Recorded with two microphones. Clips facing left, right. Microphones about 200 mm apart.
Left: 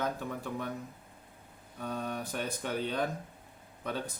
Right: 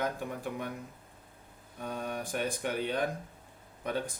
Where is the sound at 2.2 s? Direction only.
15° right (ahead or behind).